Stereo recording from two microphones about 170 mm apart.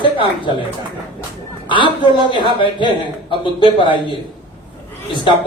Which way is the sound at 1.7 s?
30° left (ahead or behind).